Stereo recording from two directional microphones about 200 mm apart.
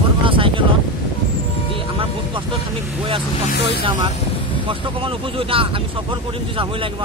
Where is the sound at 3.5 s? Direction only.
55° left (ahead or behind).